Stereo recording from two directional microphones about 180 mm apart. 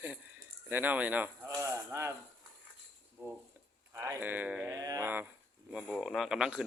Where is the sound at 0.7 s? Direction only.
10° right (ahead or behind).